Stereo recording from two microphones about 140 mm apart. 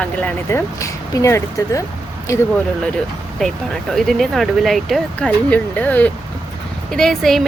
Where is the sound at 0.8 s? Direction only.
20° left (ahead or behind).